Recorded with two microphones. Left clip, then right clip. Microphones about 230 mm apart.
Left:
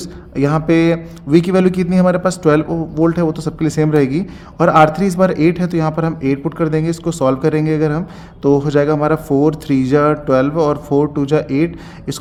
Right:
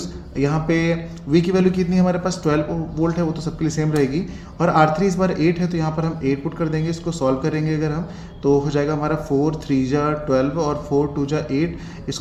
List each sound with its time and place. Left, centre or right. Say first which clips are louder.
0.3 s a man's voice: left 6 dB; left